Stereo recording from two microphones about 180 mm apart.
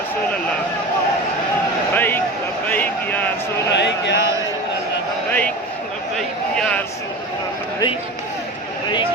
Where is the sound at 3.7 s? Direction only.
75° left (ahead or behind).